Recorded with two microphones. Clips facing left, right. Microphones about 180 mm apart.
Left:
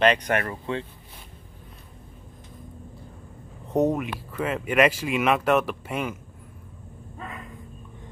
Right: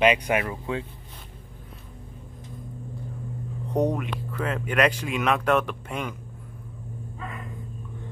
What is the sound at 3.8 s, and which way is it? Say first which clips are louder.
Speech: left 2 dB; 5° left (ahead or behind).